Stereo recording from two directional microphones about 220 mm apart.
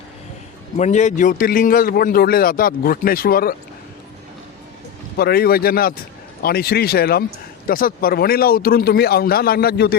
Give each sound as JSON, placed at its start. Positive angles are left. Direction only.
{"t": 0.8, "sound": "a man's voice", "side_deg": 30}
{"t": 5.1, "sound": "speech", "side_deg": 45}